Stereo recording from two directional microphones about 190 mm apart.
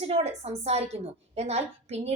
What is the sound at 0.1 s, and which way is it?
A woman's voice, 35° right (ahead or behind).